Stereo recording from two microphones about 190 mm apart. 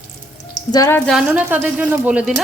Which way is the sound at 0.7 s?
15° left (ahead or behind).